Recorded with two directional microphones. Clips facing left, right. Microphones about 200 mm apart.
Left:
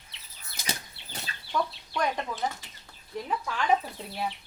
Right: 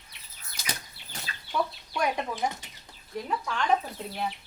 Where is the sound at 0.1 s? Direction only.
25° left (ahead or behind).